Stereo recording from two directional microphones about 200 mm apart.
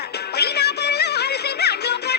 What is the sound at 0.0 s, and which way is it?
Music, 55° left (ahead or behind).